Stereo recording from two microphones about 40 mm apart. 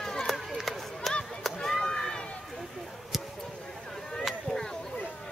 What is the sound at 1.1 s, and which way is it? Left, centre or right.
Chop, centre.